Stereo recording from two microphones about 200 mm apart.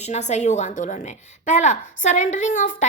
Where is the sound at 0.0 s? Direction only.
35° left (ahead or behind).